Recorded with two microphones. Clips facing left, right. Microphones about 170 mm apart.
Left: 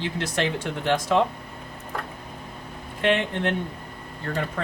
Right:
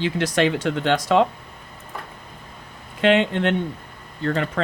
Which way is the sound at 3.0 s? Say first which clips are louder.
Right 5 dB; 90° right.